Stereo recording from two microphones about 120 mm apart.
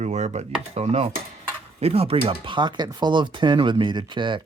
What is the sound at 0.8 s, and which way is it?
Speech, 60° right (ahead or behind).